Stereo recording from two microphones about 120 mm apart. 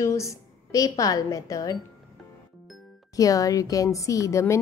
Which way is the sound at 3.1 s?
30° left (ahead or behind).